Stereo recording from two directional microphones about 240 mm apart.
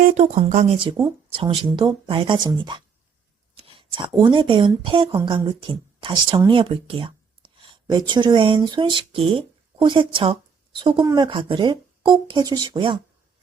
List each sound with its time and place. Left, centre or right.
0.0 s speech: right